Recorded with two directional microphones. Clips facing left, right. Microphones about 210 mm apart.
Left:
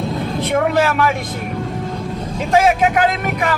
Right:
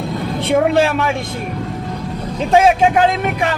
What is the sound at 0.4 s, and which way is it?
Speech, 30° right (ahead or behind).